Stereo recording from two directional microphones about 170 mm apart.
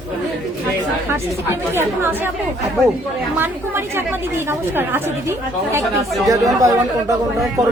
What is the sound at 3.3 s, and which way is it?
A woman's voice, 15° right (ahead or behind).